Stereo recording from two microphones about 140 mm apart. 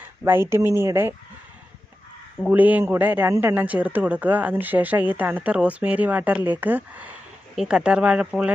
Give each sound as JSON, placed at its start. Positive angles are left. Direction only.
{"t": 0.3, "sound": "a man's voice", "side_deg": -15}
{"t": 2.5, "sound": "a man's voice", "side_deg": -10}